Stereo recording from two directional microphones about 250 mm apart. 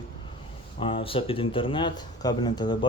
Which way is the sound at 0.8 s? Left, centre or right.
Left.